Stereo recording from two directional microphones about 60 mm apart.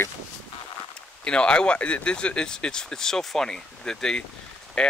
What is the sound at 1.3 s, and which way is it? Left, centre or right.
Speech, centre.